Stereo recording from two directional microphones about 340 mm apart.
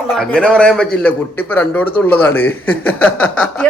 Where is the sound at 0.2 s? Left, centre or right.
Centre.